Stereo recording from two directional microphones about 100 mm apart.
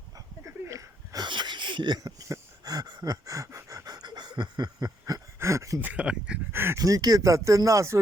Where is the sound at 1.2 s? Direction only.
50° right (ahead or behind); by 5.8 s 30° right (ahead or behind).